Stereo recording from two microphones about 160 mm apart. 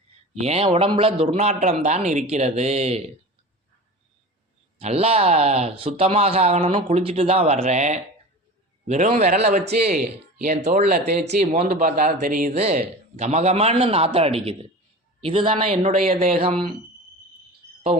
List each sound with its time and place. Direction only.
0.3 s a man's voice: 40° right (ahead or behind)
4.8 s a man's voice: 40° right (ahead or behind); by 12.5 s 55° right (ahead or behind)
12.5 s a man's voice: 45° right (ahead or behind)